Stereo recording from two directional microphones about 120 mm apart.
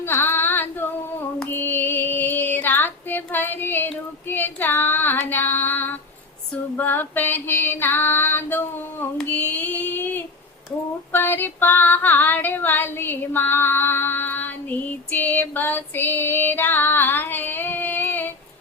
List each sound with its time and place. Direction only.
0.0 s female singing: 20° left (ahead or behind)
9.1 s a sound: 15° left (ahead or behind)
11.1 s female singing: 15° left (ahead or behind)